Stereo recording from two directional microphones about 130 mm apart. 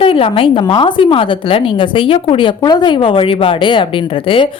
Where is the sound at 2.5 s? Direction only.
30° left (ahead or behind).